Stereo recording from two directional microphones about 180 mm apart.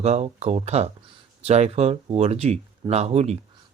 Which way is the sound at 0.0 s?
35° right (ahead or behind).